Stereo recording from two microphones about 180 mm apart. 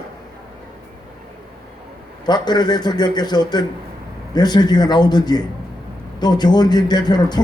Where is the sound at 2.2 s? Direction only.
25° left (ahead or behind).